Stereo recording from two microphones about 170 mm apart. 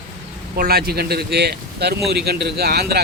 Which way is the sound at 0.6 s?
65° right (ahead or behind).